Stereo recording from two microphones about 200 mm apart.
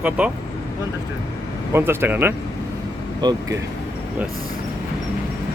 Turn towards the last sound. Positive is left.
turn(degrees=-20)  # may be behind; listen again after turning